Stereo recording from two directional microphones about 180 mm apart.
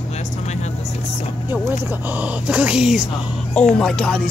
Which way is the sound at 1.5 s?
10° right (ahead or behind).